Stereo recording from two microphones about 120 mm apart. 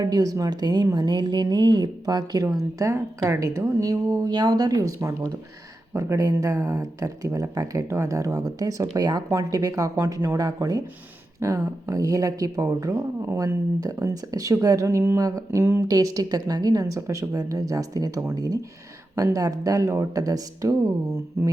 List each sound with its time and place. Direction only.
0.0 s speech: 30° right (ahead or behind)